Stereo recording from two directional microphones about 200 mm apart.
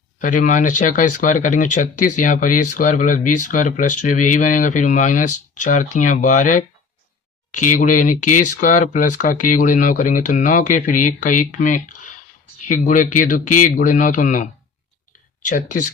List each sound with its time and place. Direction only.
0.2 s speech: 40° left (ahead or behind)
15.4 s speech: 40° left (ahead or behind)